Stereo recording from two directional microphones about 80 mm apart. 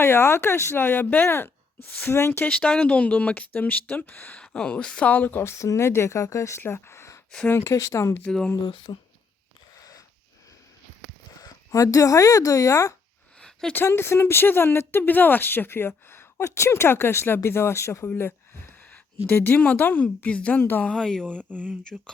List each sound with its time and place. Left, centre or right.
0.0 s speech: left
2.4 s speech: centre
4.4 s speech: centre
5.4 s speech: left
8.9 s speech: left
9.7 s wheeze: left
11.3 s speech: left
13.4 s a sound: centre
13.8 s speech: left
20.8 s speech: centre
21.3 s speech: right